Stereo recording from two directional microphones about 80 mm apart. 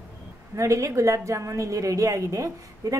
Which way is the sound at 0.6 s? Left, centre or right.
Right.